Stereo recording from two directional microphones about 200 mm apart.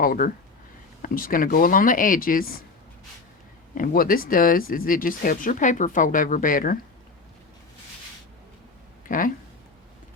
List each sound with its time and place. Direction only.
0.0 s speech: 45° left (ahead or behind)
3.8 s speech: 45° left (ahead or behind)
9.0 s speech: 40° left (ahead or behind)